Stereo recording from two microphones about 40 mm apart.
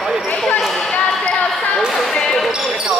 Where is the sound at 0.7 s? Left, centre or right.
Left.